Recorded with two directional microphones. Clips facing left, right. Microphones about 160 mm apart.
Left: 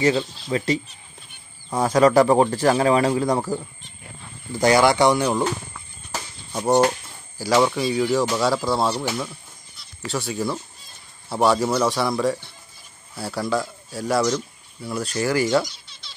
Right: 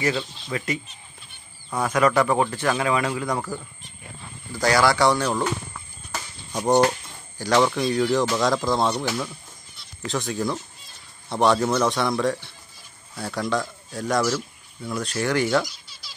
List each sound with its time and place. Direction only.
0.0 s speech: 30° left (ahead or behind)
1.8 s speech: 35° left (ahead or behind)
3.3 s speech: 20° left (ahead or behind)
6.1 s a sound: 5° left (ahead or behind)
7.3 s speech: 5° left (ahead or behind)
15.6 s a sound: 5° right (ahead or behind)